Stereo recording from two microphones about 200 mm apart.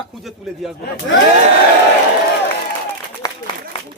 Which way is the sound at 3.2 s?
20° left (ahead or behind).